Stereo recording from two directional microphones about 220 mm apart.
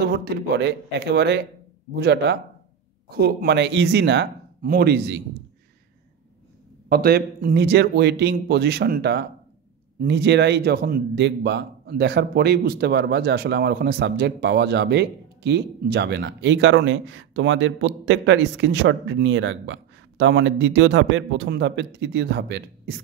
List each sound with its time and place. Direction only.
0.0 s a man's voice: 45° right (ahead or behind)
6.9 s a man's voice: 45° right (ahead or behind)